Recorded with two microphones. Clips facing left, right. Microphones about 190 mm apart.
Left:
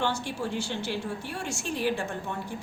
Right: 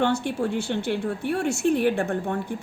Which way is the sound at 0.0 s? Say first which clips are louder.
Right 7 dB; 60° right (ahead or behind).